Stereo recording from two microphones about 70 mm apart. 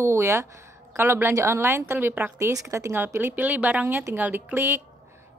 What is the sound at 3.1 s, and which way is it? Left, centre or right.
Speech, right.